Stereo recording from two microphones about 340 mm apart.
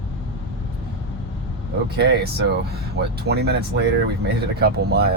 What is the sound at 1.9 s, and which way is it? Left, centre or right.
Speech, right.